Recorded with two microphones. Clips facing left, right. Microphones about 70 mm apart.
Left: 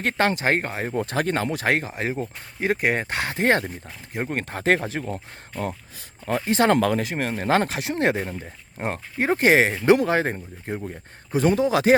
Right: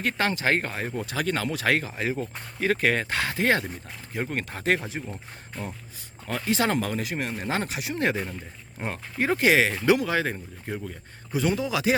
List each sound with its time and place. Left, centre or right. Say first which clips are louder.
0.0 s a man's voice: left 4 dB; left
0.9 s a man's voice: left 5 dB; left
6.2 s a man's voice: left 6 dB; left
6.7 s speech: left 7 dB; left
7.0 s a man's voice: left 4 dB; left
7.4 s speech: left 11 dB; left
7.9 s a man's voice: left 3 dB; left